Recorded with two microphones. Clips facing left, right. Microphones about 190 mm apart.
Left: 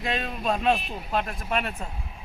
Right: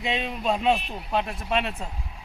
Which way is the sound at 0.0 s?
20° right (ahead or behind).